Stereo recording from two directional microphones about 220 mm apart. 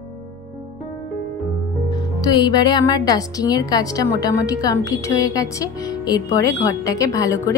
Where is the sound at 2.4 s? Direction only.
20° left (ahead or behind).